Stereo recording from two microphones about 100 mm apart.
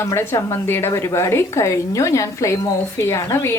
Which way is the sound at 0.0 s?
25° left (ahead or behind).